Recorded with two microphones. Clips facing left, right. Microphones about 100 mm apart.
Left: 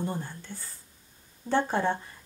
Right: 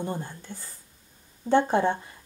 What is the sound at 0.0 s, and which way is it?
Speech, 15° right (ahead or behind).